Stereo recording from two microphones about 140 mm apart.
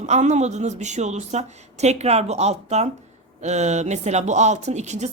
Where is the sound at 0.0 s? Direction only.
55° right (ahead or behind).